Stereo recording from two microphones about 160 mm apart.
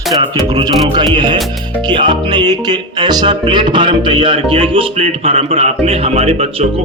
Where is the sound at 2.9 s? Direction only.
25° right (ahead or behind).